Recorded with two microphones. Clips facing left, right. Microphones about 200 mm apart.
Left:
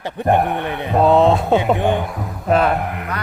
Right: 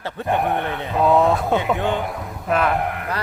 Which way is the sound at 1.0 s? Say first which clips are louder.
Left 3 dB; 25° left (ahead or behind).